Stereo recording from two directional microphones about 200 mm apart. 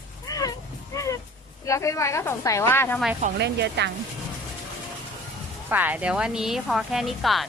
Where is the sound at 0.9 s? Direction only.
15° left (ahead or behind).